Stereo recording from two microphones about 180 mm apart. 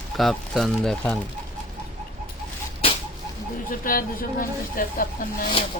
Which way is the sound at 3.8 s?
50° left (ahead or behind).